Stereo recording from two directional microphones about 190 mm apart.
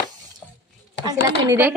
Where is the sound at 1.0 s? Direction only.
20° right (ahead or behind).